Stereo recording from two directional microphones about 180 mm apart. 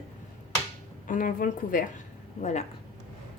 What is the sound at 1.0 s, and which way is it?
Speech, 45° left (ahead or behind).